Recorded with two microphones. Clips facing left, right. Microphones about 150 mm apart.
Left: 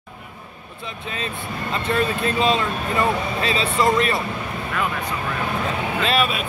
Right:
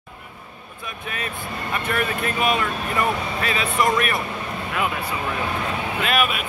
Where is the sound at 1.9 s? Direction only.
25° left (ahead or behind).